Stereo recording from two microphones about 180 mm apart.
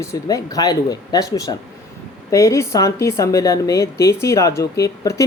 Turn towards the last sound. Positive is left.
turn(degrees=15)  # may be behind; listen again after turning